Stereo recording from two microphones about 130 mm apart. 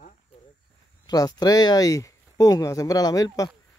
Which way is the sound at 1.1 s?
30° left (ahead or behind).